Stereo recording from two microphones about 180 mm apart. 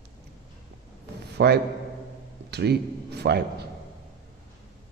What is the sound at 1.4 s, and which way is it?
A man's voice, 65° right (ahead or behind).